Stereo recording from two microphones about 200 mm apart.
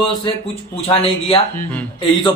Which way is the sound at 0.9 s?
30° left (ahead or behind).